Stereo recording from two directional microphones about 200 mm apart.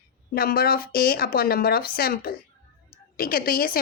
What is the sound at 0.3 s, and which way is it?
A woman's voice, 50° left (ahead or behind).